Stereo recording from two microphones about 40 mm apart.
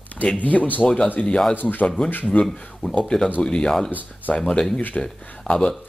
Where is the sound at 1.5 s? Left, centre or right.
Left.